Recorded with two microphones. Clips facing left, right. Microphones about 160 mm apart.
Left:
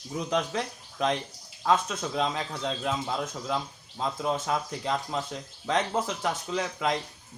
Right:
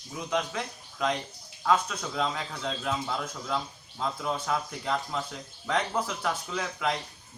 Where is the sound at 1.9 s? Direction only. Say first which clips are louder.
Left 2 dB; 20° left (ahead or behind).